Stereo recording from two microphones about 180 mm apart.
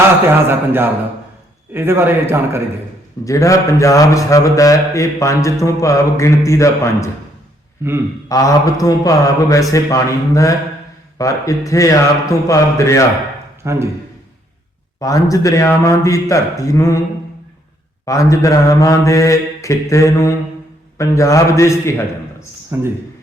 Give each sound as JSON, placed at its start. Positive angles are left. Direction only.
{"t": 0.4, "sound": "a man's voice", "side_deg": -10}
{"t": 3.2, "sound": "a man's voice", "side_deg": 20}
{"t": 7.8, "sound": "a man's voice", "side_deg": -10}
{"t": 8.3, "sound": "a man's voice", "side_deg": 20}
{"t": 13.7, "sound": "a man's voice", "side_deg": -15}
{"t": 14.9, "sound": "a man's voice", "side_deg": 20}
{"t": 18.0, "sound": "a man's voice", "side_deg": 20}
{"t": 22.7, "sound": "a man's voice", "side_deg": -15}